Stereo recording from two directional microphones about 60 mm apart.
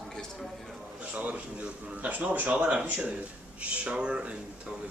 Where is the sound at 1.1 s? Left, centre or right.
Right.